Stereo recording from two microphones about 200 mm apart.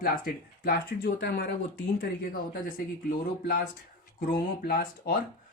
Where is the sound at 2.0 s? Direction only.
50° left (ahead or behind).